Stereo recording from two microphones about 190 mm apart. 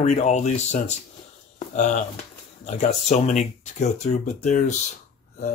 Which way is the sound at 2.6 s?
40° left (ahead or behind).